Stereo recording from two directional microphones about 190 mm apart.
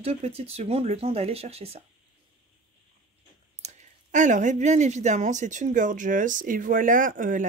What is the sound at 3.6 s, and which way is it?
Speech, 40° right (ahead or behind).